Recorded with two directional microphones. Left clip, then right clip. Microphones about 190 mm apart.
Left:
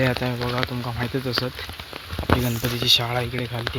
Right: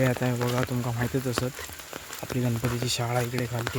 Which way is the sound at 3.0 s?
15° right (ahead or behind).